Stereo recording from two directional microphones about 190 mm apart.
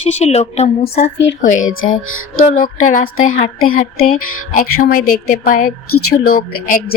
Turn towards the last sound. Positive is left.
turn(degrees=50)  # may be behind; listen again after turning